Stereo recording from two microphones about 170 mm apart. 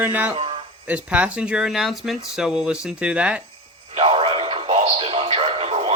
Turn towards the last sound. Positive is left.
turn(degrees=-35)  # may be behind; listen again after turning